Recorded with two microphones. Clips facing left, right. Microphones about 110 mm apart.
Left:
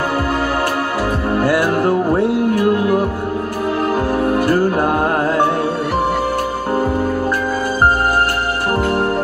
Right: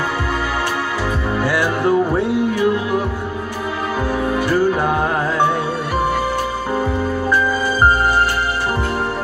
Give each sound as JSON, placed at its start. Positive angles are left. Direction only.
{"t": 1.6, "sound": "music", "side_deg": 5}
{"t": 2.5, "sound": "music", "side_deg": 55}
{"t": 4.1, "sound": "music", "side_deg": 5}
{"t": 6.7, "sound": "music", "side_deg": 10}